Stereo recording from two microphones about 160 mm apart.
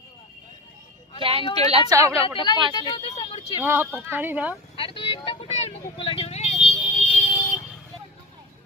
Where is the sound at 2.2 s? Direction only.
30° left (ahead or behind).